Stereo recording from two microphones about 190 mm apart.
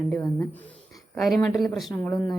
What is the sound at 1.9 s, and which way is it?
Speech, 15° left (ahead or behind).